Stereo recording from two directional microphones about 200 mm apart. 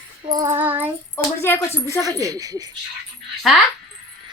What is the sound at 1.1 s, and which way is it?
Speech, 10° left (ahead or behind).